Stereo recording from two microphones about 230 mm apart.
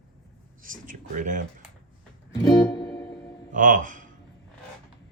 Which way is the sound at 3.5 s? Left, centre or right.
Right.